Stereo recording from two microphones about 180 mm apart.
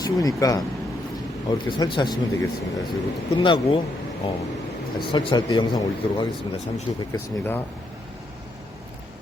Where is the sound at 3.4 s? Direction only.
30° left (ahead or behind).